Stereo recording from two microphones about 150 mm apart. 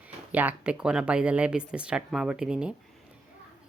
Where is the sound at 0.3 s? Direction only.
10° right (ahead or behind).